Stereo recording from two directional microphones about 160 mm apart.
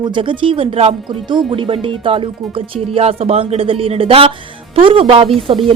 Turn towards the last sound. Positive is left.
turn(degrees=-35)  # may be behind; listen again after turning